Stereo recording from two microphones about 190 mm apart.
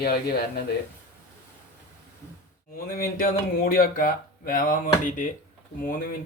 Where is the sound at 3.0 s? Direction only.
50° left (ahead or behind).